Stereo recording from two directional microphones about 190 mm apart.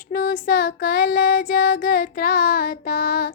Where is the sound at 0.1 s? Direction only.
50° left (ahead or behind).